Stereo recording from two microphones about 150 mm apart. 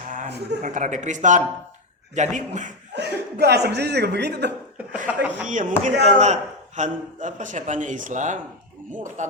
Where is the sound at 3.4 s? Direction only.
90° right.